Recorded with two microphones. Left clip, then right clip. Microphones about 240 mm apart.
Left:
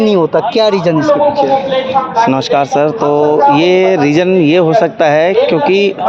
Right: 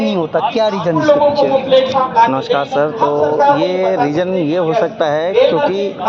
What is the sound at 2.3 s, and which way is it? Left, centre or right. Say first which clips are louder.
Speech: left 4 dB; left.